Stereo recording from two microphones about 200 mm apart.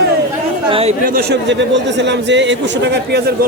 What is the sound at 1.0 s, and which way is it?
A man's voice, 50° right (ahead or behind).